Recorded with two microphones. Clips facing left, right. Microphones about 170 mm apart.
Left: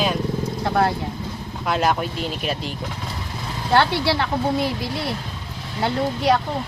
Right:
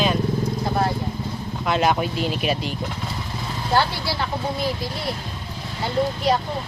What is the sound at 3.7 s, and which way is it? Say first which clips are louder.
Speech: left 4 dB; 65° left (ahead or behind).